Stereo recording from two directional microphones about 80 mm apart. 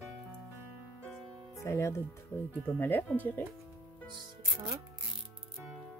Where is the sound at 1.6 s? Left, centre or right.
Left.